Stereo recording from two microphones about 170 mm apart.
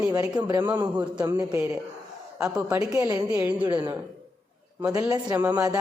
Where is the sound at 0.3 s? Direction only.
15° right (ahead or behind).